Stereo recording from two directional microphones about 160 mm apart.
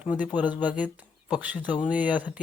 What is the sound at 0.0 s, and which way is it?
Speech, 5° right (ahead or behind).